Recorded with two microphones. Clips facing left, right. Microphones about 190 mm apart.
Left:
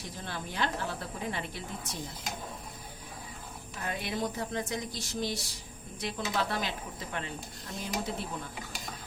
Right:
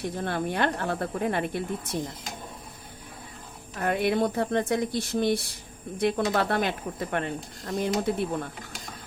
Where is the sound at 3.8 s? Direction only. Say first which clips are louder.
Right 10 dB; 60° right (ahead or behind).